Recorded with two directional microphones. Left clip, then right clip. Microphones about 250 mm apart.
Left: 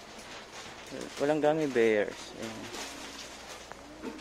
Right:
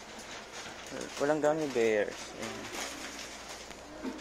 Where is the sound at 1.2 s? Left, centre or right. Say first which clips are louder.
Left 2 dB; left.